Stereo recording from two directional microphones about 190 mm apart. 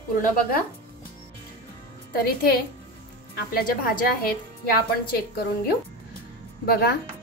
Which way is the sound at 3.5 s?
50° left (ahead or behind).